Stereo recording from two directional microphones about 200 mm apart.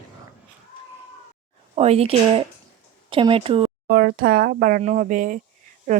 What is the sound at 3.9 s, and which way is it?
Speech, 50° right (ahead or behind).